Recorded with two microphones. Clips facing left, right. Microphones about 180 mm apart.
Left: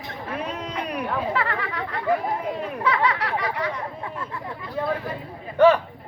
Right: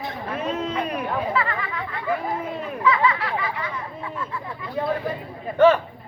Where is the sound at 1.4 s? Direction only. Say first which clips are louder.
Even; 75° left (ahead or behind).